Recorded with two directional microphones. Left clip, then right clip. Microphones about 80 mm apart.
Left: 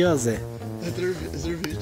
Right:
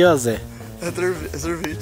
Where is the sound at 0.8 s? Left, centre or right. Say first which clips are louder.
Right 6 dB; right.